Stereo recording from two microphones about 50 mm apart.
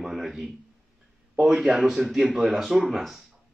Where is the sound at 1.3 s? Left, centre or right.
Right.